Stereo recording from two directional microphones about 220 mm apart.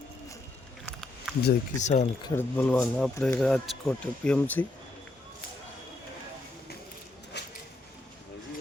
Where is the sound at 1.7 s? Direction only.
35° left (ahead or behind).